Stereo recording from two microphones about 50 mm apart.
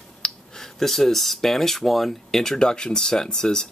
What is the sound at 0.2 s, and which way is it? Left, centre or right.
Speech, centre.